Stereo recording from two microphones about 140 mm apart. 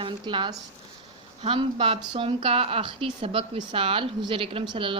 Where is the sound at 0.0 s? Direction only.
35° right (ahead or behind).